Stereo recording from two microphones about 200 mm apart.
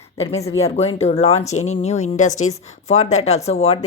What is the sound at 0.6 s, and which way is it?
Speech, 30° left (ahead or behind).